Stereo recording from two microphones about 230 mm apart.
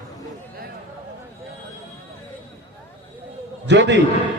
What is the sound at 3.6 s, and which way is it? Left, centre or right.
Speech, right.